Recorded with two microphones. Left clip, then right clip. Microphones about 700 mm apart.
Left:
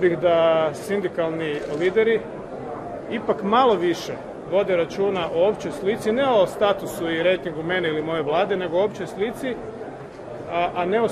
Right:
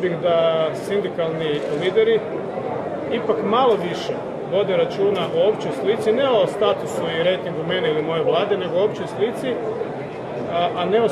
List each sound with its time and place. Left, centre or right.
0.0 s speech: left
10.5 s speech: left